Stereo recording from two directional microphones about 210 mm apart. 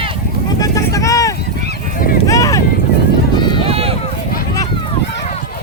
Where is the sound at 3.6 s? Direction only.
30° right (ahead or behind).